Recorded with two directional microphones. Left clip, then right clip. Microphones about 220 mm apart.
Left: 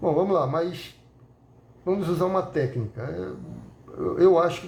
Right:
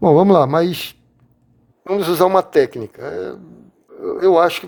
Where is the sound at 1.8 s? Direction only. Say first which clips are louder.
Right 10 dB; 45° right (ahead or behind).